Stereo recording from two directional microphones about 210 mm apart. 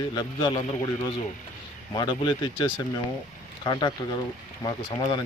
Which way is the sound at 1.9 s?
20° left (ahead or behind).